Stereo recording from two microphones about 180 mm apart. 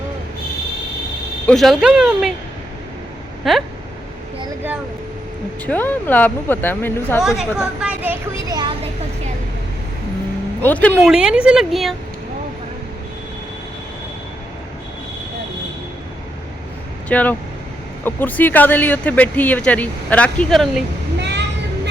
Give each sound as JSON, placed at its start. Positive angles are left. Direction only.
{"t": 1.5, "sound": "speech", "side_deg": 0}
{"t": 3.4, "sound": "speech", "side_deg": 0}
{"t": 5.6, "sound": "speech", "side_deg": 10}
{"t": 7.2, "sound": "speech", "side_deg": 0}
{"t": 10.6, "sound": "speech", "side_deg": 10}
{"t": 11.1, "sound": "speech", "side_deg": -5}
{"t": 17.1, "sound": "speech", "side_deg": 10}
{"t": 21.2, "sound": "children playing", "side_deg": -70}